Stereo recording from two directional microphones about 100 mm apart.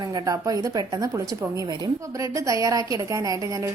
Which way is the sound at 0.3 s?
35° right (ahead or behind).